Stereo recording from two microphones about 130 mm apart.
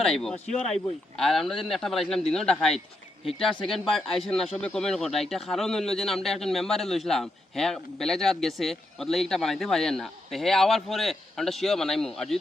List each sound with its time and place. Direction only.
0.0 s speech: 5° left (ahead or behind)